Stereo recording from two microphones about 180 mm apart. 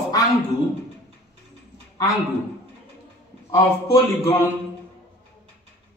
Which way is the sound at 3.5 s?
15° left (ahead or behind).